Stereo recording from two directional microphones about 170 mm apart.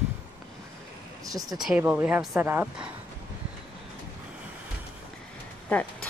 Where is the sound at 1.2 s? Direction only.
20° right (ahead or behind).